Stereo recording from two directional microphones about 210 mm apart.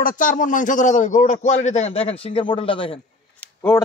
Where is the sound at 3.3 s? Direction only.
10° left (ahead or behind).